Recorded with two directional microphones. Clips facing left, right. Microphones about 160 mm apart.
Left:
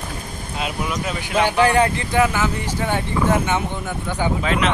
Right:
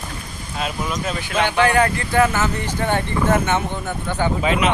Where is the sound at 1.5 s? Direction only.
35° left (ahead or behind).